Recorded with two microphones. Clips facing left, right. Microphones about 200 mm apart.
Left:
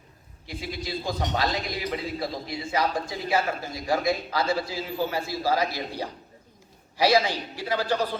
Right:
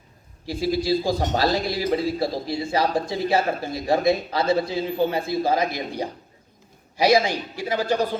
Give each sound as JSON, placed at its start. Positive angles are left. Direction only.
{"t": 0.4, "sound": "a man's voice", "side_deg": -35}